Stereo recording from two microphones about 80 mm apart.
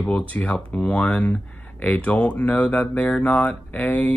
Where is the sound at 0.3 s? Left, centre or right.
Centre.